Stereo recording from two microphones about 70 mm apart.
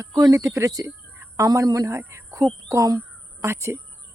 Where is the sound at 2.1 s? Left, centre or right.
Right.